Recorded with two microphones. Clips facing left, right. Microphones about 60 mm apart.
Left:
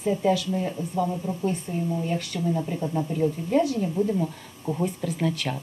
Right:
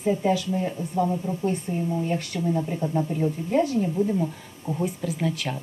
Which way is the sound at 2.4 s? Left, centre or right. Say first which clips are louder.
Right 1 dB; centre.